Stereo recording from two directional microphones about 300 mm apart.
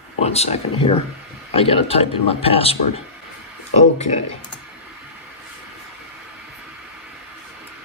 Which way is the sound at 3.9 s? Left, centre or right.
Left.